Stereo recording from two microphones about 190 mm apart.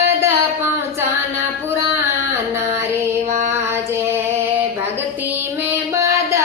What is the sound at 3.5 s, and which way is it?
Female singing, 10° right (ahead or behind).